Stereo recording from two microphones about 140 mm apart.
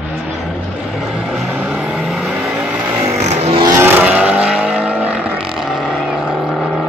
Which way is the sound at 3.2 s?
45° right (ahead or behind).